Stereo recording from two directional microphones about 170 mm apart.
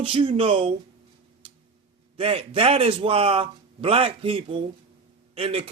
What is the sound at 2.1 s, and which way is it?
A man's voice, 35° right (ahead or behind).